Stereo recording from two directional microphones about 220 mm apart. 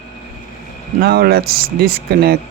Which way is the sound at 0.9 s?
45° right (ahead or behind).